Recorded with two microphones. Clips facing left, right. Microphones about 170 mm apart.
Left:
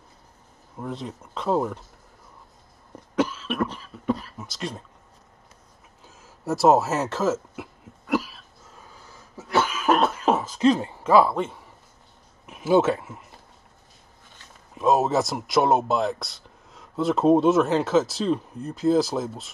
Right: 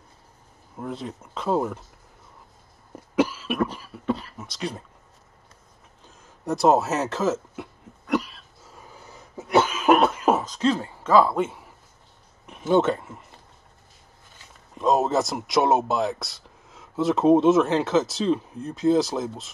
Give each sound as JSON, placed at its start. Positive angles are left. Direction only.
{"t": 0.7, "sound": "speech", "side_deg": 0}
{"t": 3.2, "sound": "cough", "side_deg": -10}
{"t": 4.0, "sound": "a sound", "side_deg": 0}
{"t": 6.0, "sound": "a sound", "side_deg": 5}
{"t": 9.0, "sound": "cough", "side_deg": -20}
{"t": 9.9, "sound": "cough", "side_deg": -5}
{"t": 10.4, "sound": "hoot", "side_deg": 10}
{"t": 11.2, "sound": "speech", "side_deg": -5}
{"t": 14.7, "sound": "speech", "side_deg": 0}